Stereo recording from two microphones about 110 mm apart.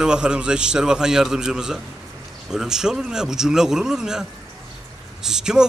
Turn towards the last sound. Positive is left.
turn(degrees=-5)  # may be behind; listen again after turning